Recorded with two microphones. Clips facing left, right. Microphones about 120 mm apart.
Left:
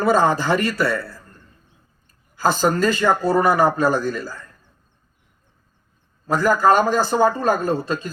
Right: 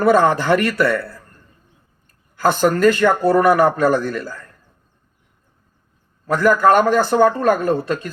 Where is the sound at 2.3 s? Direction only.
60° right (ahead or behind).